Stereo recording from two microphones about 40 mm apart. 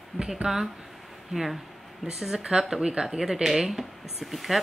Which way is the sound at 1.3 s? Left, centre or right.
Centre.